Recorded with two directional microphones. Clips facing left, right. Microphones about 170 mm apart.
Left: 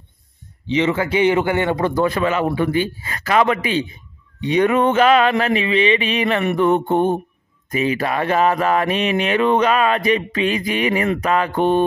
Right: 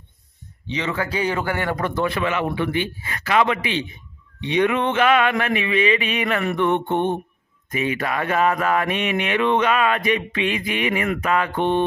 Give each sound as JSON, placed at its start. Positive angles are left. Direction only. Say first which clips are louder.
{"t": 0.7, "sound": "a man's voice", "louder": "left 7 dB", "side_deg": 25}
{"t": 2.0, "sound": "speech", "louder": "left 4 dB", "side_deg": 40}